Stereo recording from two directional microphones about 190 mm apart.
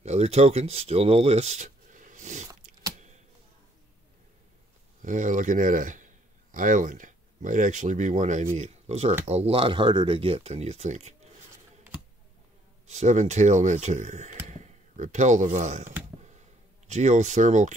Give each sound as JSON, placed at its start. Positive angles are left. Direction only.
{"t": 0.0, "sound": "speech", "side_deg": -35}
{"t": 5.0, "sound": "speech", "side_deg": -45}
{"t": 12.8, "sound": "speech", "side_deg": -35}
{"t": 16.2, "sound": "a sound", "side_deg": -40}